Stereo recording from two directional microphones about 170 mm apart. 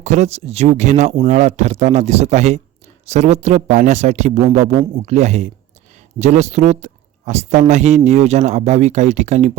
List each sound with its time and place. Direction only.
0.0 s speech: 45° right (ahead or behind)